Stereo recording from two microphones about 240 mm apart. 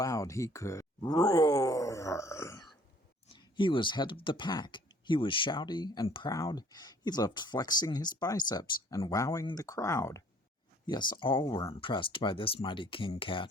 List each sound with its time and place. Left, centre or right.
0.0 s speech: centre